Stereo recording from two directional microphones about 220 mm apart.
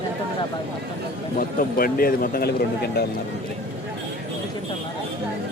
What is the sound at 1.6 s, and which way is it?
Speech, 40° left (ahead or behind).